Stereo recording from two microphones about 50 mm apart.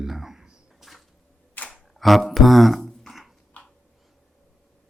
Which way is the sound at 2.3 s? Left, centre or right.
Centre.